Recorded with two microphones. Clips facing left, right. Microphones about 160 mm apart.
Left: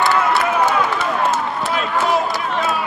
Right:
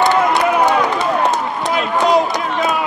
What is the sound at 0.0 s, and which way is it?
Run, 20° right (ahead or behind).